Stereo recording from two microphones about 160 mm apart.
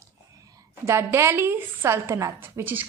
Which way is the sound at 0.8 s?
15° right (ahead or behind).